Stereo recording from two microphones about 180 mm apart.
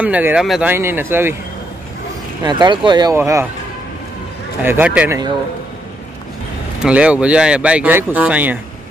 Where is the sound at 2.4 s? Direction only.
25° right (ahead or behind).